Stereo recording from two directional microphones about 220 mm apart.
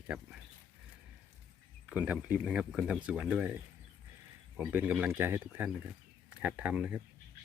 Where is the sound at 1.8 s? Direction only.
5° right (ahead or behind).